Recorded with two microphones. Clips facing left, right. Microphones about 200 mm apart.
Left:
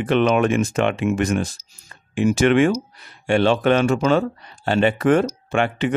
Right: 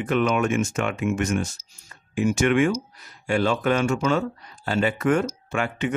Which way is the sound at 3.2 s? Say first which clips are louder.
Left 5 dB; 75° left (ahead or behind).